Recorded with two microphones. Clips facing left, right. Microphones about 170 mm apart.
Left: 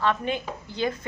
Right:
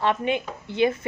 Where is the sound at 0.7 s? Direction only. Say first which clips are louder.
Right 6 dB; 25° right (ahead or behind).